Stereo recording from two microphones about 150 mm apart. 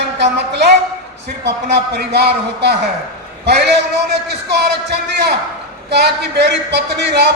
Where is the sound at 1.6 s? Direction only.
90° right.